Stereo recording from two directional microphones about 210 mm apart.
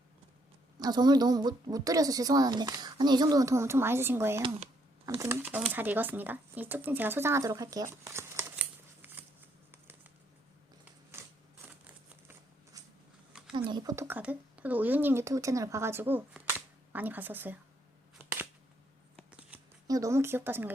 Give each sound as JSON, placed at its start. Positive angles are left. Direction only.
{"t": 0.8, "sound": "a woman's voice", "side_deg": -20}
{"t": 9.7, "sound": "patter", "side_deg": -10}
{"t": 11.1, "sound": "a sound", "side_deg": -10}
{"t": 13.5, "sound": "speech", "side_deg": -20}
{"t": 19.5, "sound": "speech", "side_deg": -15}